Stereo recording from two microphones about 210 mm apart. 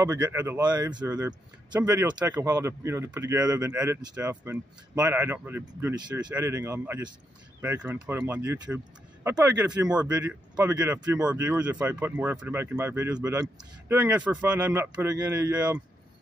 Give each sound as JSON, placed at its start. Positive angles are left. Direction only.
{"t": 0.0, "sound": "speech", "side_deg": -15}